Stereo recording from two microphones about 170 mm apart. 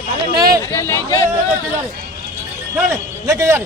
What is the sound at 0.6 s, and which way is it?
Speech, 15° left (ahead or behind).